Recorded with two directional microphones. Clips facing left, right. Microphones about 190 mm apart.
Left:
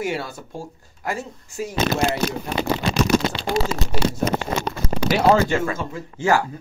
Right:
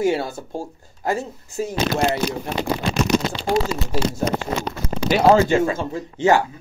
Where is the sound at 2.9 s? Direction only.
85° left.